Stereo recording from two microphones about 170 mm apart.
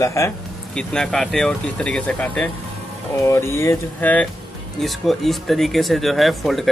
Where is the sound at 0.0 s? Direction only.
15° left (ahead or behind).